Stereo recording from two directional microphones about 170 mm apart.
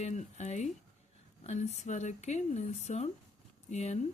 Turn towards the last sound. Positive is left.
turn(degrees=40)  # may be behind; listen again after turning